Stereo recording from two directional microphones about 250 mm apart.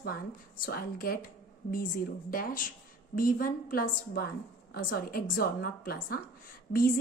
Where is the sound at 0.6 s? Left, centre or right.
Left.